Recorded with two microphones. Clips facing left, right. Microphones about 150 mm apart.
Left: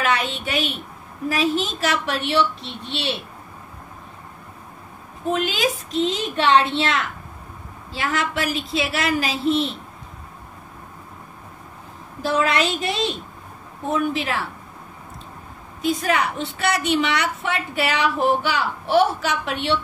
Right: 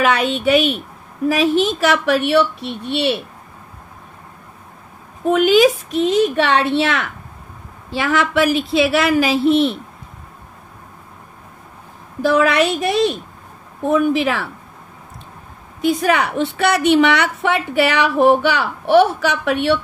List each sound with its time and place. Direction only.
1.3 s a woman's voice: 65° right (ahead or behind)
5.3 s a woman's voice: 70° right (ahead or behind)
12.2 s a woman's voice: 65° right (ahead or behind)
15.8 s a woman's voice: 70° right (ahead or behind)